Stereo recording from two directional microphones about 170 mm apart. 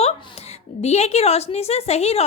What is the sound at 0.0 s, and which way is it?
A woman's voice, 35° left (ahead or behind).